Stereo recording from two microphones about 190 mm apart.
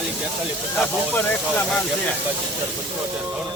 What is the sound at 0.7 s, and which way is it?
Speech, 5° left (ahead or behind).